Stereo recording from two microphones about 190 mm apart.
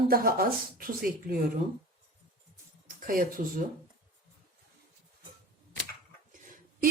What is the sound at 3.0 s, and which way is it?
Speech, 45° right (ahead or behind).